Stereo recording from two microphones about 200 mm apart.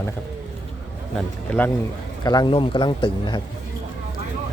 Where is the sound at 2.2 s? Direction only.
20° left (ahead or behind).